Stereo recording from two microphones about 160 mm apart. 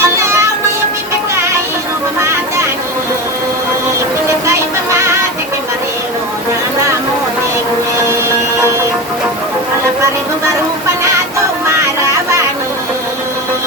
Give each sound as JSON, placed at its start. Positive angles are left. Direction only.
{"t": 0.0, "sound": "music", "side_deg": -15}